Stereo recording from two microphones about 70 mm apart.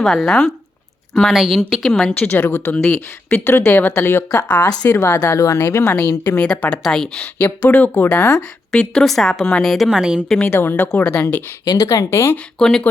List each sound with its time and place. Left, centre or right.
0.0 s speech: centre
1.3 s a woman's voice: centre
2.1 s speech: left
4.6 s speech: left
4.9 s speech: left
6.3 s speech: centre
6.8 s speech: centre
7.2 s speech: left
8.3 s a woman's voice: centre
10.5 s speech: left
11.6 s speech: left
11.9 s speech: left
12.5 s speech: centre